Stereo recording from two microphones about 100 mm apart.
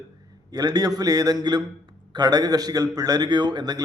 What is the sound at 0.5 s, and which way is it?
A man's voice, 40° right (ahead or behind).